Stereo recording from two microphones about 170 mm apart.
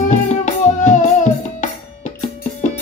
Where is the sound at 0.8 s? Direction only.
45° left (ahead or behind).